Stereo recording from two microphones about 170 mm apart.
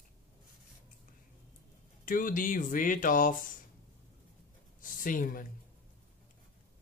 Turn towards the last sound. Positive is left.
turn(degrees=55)  # may be behind; listen again after turning